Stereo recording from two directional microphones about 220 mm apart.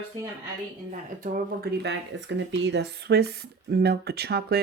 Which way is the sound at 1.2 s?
40° right (ahead or behind).